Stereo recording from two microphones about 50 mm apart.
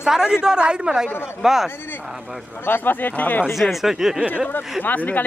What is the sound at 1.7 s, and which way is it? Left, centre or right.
Speech, left.